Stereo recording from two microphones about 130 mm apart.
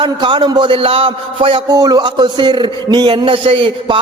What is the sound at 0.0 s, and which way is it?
A man's voice, 35° right (ahead or behind).